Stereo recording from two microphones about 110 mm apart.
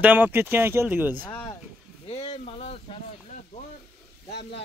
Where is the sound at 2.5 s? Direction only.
70° left (ahead or behind).